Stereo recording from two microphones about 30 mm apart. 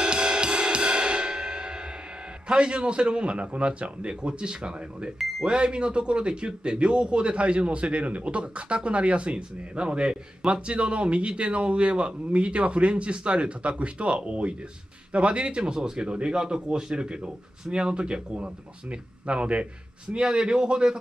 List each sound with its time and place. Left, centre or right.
0.0 s music: right
2.4 s speech: right
20.2 s a man's voice: right